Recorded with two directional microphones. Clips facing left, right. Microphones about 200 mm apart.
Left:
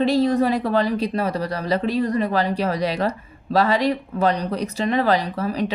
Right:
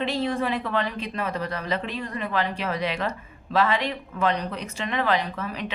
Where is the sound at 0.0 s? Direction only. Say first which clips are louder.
Left 8 dB; 40° left (ahead or behind).